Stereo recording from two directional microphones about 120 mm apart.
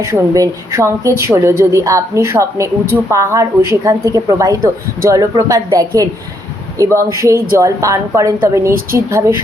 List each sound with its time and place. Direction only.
0.0 s a woman's voice: 30° right (ahead or behind)